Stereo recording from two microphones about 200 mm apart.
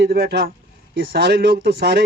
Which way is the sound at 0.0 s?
50° right (ahead or behind).